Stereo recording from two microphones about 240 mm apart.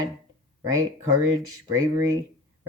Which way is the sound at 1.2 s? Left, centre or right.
Centre.